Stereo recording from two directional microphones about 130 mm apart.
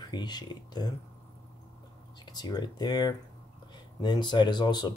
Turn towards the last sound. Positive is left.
turn(degrees=35)  # may be behind; listen again after turning